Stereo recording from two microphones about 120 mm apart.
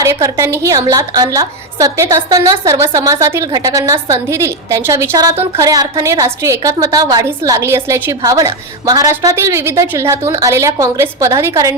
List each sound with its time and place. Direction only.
0.0 s a woman's voice: 25° right (ahead or behind)
8.2 s a woman's voice: 30° right (ahead or behind)